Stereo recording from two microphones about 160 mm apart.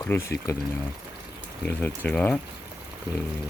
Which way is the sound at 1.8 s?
10° left (ahead or behind).